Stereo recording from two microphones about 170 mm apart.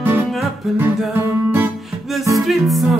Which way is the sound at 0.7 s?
15° right (ahead or behind).